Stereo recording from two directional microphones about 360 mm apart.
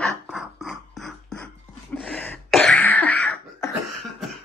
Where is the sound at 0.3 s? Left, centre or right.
Centre.